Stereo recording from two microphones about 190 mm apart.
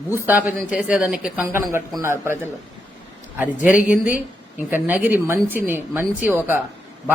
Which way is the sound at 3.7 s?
45° left (ahead or behind).